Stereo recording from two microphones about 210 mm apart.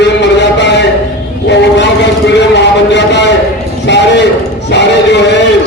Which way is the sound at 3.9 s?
55° left (ahead or behind).